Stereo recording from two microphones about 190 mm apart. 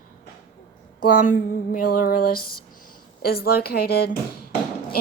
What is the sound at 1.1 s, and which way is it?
A woman's voice, 45° left (ahead or behind).